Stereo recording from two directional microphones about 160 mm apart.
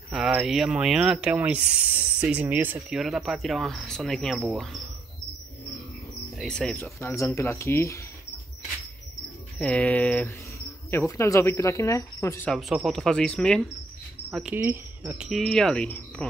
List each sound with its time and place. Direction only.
0.1 s speech: centre (ahead or behind)
6.3 s speech: 5° left (ahead or behind)
9.6 s speech: 10° left (ahead or behind)
12.4 s speech: centre (ahead or behind)
14.3 s speech: 10° right (ahead or behind)